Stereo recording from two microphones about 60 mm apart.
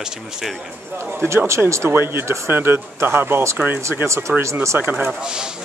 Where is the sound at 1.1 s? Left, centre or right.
Right.